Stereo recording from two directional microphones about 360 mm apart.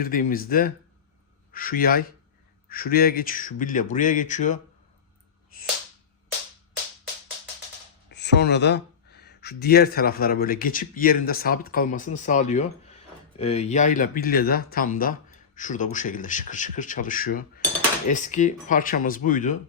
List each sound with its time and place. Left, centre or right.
0.0 s speech: left
8.1 s speech: left